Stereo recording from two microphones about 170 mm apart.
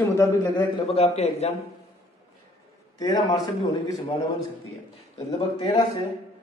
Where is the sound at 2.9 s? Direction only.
20° left (ahead or behind).